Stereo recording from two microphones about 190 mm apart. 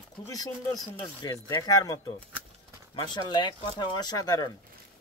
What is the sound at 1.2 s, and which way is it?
Speech, 20° left (ahead or behind).